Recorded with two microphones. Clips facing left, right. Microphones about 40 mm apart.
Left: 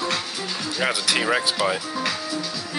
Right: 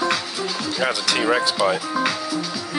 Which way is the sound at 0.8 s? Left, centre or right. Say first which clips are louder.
Right 1 dB; centre.